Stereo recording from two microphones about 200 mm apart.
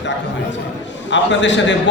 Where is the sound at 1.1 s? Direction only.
65° left (ahead or behind).